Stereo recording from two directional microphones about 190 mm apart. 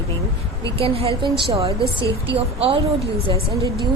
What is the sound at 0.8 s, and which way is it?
Speech, 30° right (ahead or behind).